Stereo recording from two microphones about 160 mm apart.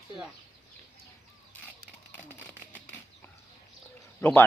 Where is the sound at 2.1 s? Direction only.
10° left (ahead or behind).